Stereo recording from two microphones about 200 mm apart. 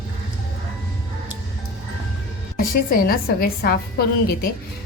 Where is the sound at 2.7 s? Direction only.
45° left (ahead or behind).